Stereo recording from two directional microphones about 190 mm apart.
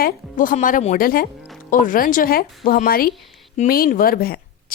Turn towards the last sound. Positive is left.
turn(degrees=50)  # may be behind; listen again after turning